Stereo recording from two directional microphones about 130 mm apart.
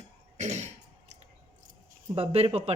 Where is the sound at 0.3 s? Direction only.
65° right (ahead or behind).